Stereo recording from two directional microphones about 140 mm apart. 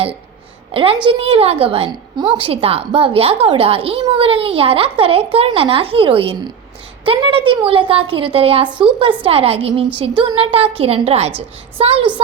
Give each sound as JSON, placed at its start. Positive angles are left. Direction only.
{"t": 0.7, "sound": "a child's voice", "side_deg": -40}